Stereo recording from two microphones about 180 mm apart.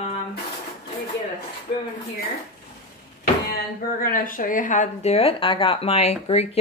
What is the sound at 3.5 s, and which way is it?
A woman's voice, 55° left (ahead or behind).